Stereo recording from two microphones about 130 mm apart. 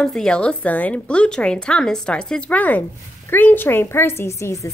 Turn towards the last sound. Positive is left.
turn(degrees=25)  # may be behind; listen again after turning